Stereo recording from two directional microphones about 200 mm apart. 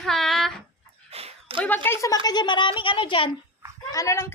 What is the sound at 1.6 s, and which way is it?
Speech, 10° left (ahead or behind).